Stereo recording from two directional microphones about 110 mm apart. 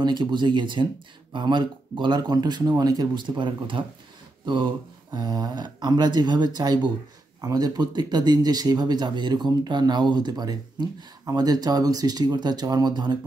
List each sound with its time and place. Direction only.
0.0 s speech: 40° right (ahead or behind)